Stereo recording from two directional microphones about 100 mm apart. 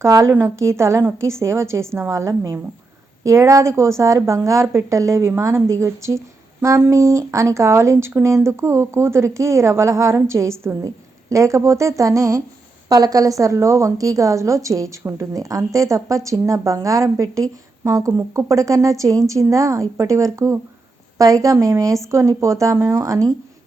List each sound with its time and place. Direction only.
0.0 s a woman's voice: 30° right (ahead or behind)